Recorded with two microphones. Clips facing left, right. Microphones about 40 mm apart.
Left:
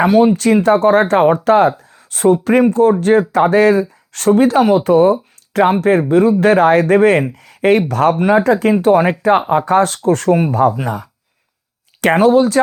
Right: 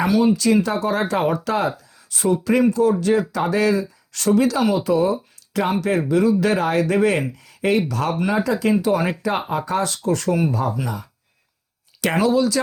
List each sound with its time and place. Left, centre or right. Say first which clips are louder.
0.0 s speech: left 6 dB; left